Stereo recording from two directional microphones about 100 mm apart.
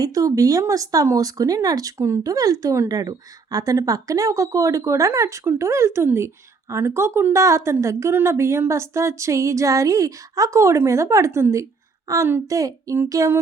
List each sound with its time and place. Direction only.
0.0 s a woman's voice: 35° right (ahead or behind)